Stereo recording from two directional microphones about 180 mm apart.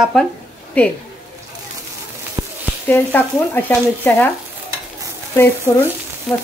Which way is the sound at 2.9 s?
10° left (ahead or behind).